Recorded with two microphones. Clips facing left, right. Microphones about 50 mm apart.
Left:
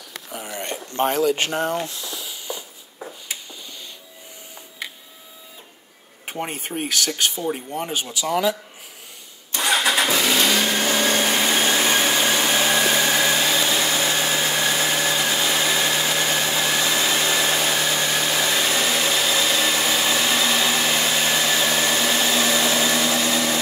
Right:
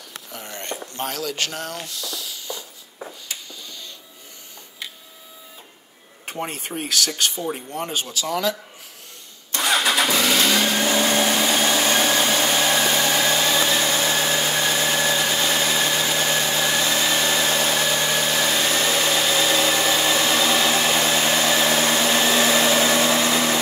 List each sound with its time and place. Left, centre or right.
0.3 s a sound: centre
0.9 s speech: left
6.2 s speech: centre
9.9 s vehicle: left
11.2 s vacuum cleaner: centre
13.7 s a sound: centre